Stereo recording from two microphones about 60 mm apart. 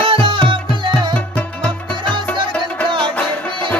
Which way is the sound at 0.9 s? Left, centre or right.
Left.